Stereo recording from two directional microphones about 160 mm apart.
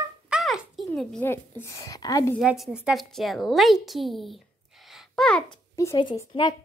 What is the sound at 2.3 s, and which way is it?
A woman's voice, centre (ahead or behind).